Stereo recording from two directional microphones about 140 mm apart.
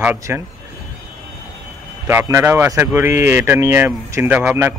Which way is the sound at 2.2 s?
20° right (ahead or behind).